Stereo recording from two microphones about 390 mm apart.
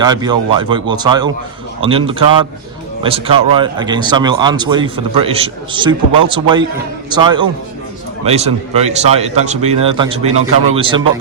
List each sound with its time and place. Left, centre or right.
0.0 s speech: centre